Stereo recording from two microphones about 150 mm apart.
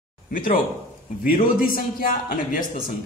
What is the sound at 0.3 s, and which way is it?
A man's voice, 65° left (ahead or behind).